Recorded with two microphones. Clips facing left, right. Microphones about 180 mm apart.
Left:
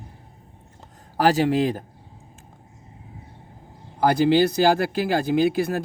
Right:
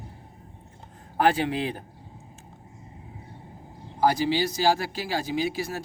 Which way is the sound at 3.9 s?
60° left (ahead or behind).